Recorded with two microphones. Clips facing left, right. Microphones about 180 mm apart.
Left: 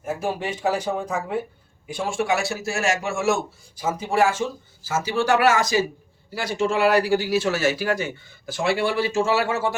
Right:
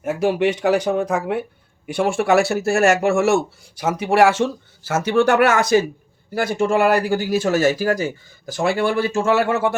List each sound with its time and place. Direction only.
0.0 s speech: 80° right; by 9.7 s 60° right (ahead or behind)